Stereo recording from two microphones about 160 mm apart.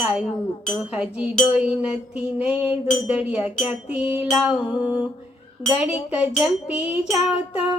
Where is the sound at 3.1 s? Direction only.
10° right (ahead or behind).